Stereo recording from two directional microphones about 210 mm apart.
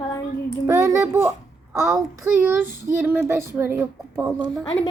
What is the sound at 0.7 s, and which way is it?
Child singing, 15° right (ahead or behind).